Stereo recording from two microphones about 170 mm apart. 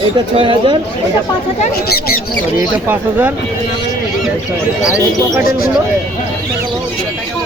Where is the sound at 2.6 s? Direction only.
10° right (ahead or behind).